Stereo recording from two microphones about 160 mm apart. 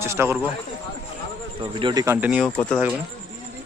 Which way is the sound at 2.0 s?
10° right (ahead or behind).